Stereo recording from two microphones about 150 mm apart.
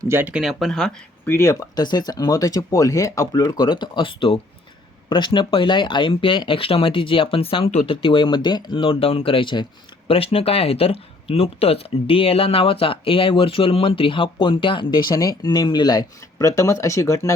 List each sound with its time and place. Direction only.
0.0 s speech: 15° right (ahead or behind); by 17.3 s 20° left (ahead or behind)